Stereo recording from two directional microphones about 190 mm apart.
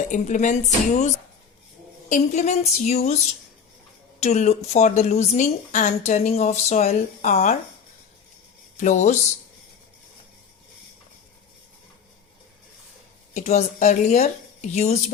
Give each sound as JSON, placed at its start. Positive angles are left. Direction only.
{"t": 0.1, "sound": "a woman's voice", "side_deg": 40}
{"t": 4.2, "sound": "a woman's voice", "side_deg": 35}
{"t": 8.8, "sound": "a woman's voice", "side_deg": 40}
{"t": 13.3, "sound": "a woman's voice", "side_deg": 35}